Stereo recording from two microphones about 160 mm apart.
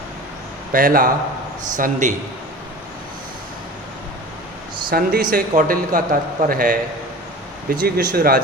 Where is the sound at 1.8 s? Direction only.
50° right (ahead or behind).